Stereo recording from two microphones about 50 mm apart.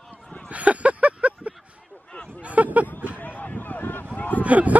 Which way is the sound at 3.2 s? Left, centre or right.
Left.